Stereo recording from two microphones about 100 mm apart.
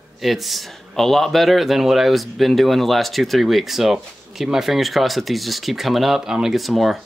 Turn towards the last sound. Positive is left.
turn(degrees=0)  # may be behind; listen again after turning